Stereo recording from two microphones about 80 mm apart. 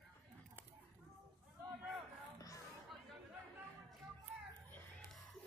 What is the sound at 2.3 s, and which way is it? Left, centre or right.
Music, left.